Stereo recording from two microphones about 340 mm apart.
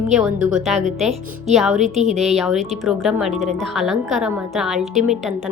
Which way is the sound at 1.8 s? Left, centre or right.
Centre.